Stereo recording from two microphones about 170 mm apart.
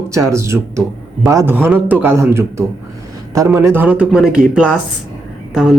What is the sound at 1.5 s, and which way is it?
Speech, 10° right (ahead or behind).